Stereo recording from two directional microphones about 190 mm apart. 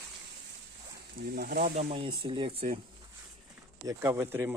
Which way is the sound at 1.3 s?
50° right (ahead or behind).